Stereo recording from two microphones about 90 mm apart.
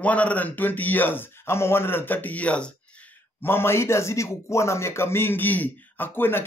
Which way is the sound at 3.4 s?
25° left (ahead or behind).